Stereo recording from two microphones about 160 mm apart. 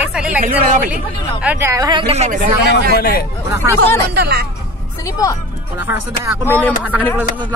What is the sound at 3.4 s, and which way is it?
Speech, 20° right (ahead or behind).